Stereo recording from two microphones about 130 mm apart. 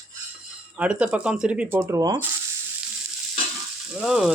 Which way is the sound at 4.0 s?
5° right (ahead or behind).